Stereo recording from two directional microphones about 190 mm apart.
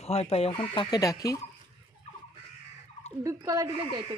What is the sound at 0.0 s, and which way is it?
Speech, 30° left (ahead or behind).